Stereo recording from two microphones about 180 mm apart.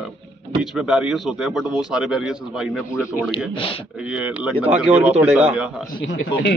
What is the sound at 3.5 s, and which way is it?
Speech, 30° left (ahead or behind).